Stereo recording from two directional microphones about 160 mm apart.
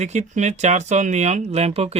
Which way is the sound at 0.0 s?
45° right (ahead or behind).